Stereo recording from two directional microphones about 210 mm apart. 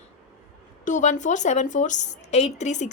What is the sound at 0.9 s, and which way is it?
A woman's voice, 35° left (ahead or behind).